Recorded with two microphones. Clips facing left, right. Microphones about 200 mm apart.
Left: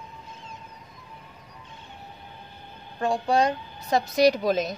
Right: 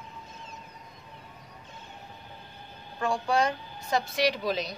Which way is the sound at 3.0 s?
35° left (ahead or behind).